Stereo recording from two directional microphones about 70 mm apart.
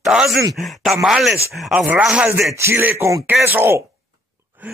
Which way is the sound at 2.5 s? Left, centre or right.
Right.